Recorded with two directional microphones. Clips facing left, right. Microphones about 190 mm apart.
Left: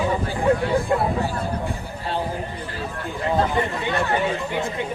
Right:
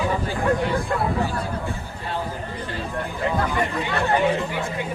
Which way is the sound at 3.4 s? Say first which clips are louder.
Left 2 dB; 20° left (ahead or behind).